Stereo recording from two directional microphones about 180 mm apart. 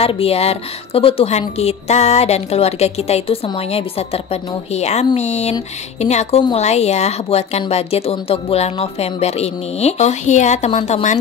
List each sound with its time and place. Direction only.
0.0 s a woman's voice: 35° left (ahead or behind)